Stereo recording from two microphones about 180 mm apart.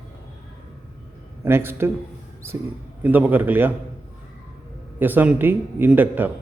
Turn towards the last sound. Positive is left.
turn(degrees=-10)  # may be behind; listen again after turning